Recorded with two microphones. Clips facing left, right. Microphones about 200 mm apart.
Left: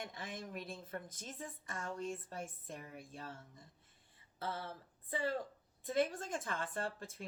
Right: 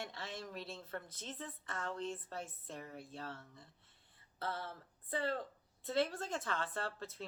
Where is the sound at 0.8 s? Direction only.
15° left (ahead or behind).